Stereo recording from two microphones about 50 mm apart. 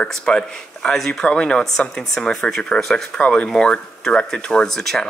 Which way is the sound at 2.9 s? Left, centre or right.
Centre.